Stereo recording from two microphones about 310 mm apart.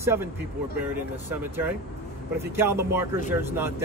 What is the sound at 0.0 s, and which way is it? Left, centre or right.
Speech, centre.